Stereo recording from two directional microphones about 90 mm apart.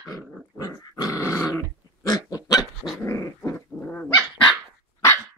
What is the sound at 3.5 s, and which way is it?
Dog, 15° left (ahead or behind).